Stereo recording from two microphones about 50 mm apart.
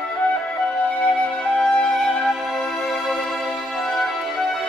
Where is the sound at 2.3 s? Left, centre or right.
Centre.